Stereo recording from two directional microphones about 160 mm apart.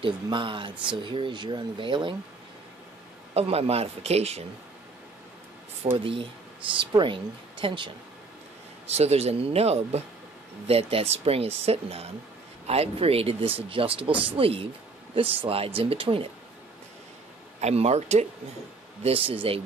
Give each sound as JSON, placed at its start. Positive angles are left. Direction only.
{"t": 0.0, "sound": "speech", "side_deg": -30}
{"t": 3.3, "sound": "speech", "side_deg": -40}
{"t": 5.8, "sound": "speech", "side_deg": -45}
{"t": 6.8, "sound": "speech", "side_deg": -30}
{"t": 17.6, "sound": "speech", "side_deg": -40}